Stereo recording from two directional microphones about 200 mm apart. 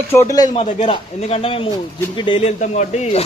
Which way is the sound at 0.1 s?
15° left (ahead or behind).